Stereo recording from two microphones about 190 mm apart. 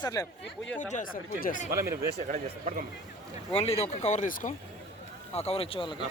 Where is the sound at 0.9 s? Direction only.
45° left (ahead or behind).